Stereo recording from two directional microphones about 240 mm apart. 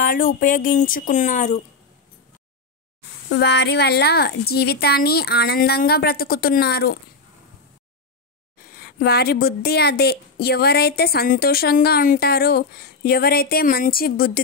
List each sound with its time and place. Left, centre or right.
0.0 s speech: left
3.3 s speech: left
8.5 s speech: left